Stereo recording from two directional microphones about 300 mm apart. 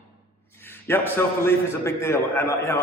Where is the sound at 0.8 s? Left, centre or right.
Centre.